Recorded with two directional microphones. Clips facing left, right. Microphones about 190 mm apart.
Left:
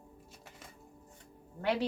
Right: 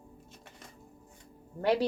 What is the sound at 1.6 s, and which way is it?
Speech, 35° right (ahead or behind).